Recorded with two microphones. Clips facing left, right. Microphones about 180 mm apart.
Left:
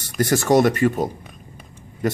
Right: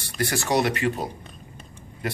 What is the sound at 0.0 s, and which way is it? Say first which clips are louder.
A man's voice: left 7 dB; 45° left (ahead or behind).